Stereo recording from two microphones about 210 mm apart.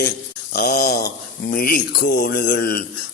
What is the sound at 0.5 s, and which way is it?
Speech, 45° left (ahead or behind).